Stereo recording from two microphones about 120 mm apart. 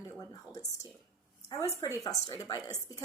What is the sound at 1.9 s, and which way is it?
Speech, 30° left (ahead or behind).